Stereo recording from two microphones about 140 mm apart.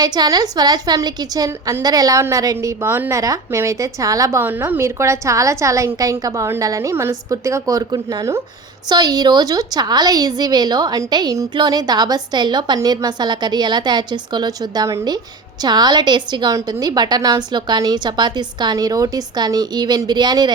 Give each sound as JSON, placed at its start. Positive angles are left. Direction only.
{"t": 0.0, "sound": "a woman's voice", "side_deg": -30}